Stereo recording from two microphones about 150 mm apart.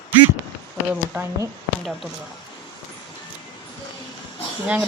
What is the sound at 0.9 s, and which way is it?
Speech, 10° right (ahead or behind).